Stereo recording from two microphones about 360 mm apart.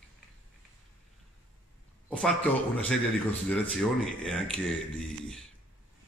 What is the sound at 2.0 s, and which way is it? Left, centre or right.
Speech, centre.